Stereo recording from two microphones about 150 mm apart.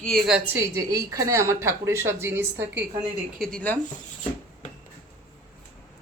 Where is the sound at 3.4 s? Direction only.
5° left (ahead or behind).